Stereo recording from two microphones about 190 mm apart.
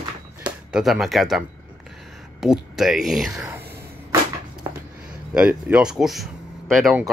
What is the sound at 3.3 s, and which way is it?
Speech, 15° right (ahead or behind).